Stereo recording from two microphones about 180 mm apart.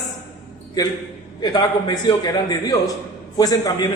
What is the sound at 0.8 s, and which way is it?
A man's voice, 20° left (ahead or behind).